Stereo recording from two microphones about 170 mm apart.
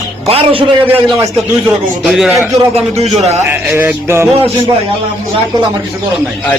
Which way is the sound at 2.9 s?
40° right (ahead or behind).